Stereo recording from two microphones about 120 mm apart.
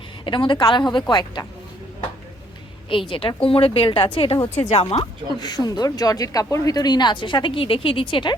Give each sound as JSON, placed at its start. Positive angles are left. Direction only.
{"t": 0.3, "sound": "speech", "side_deg": 40}
{"t": 2.9, "sound": "a woman's voice", "side_deg": 45}
{"t": 4.9, "sound": "speech", "side_deg": 35}